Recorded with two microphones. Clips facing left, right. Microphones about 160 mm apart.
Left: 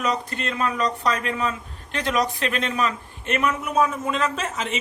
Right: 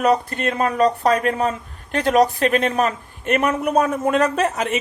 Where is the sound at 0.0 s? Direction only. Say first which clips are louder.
Right 7 dB; 50° right (ahead or behind).